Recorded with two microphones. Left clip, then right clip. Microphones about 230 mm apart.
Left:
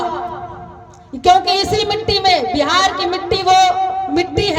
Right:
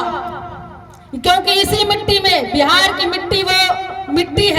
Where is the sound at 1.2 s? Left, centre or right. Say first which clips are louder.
Left 1 dB; right.